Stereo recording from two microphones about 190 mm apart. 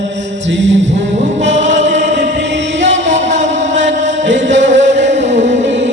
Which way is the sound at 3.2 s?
40° right (ahead or behind).